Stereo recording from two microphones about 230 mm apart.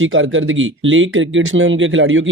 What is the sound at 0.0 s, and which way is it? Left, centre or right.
Speech, right.